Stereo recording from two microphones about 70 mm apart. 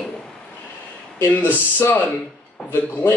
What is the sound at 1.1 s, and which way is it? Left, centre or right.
A man's voice, left.